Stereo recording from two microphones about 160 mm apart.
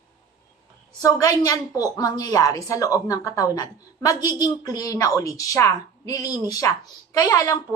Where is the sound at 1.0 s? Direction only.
20° left (ahead or behind).